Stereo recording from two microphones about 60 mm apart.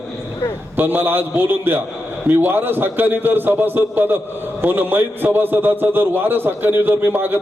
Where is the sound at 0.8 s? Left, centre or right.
Right.